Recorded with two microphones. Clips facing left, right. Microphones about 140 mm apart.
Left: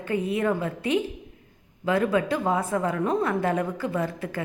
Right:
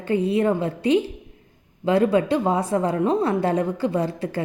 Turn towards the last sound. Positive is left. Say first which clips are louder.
# right 4 dB
turn(degrees=-30)  # may be behind; listen again after turning